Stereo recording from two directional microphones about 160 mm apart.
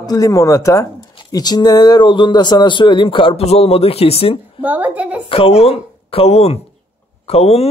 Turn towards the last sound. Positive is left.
turn(degrees=40)  # may be behind; listen again after turning